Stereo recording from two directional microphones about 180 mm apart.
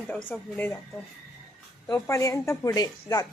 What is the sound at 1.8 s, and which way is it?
A woman's voice, 20° left (ahead or behind).